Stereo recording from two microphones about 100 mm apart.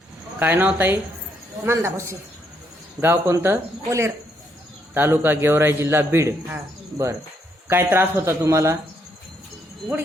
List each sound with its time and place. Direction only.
0.3 s a man's voice: 20° right (ahead or behind)
7.7 s a man's voice: 25° right (ahead or behind)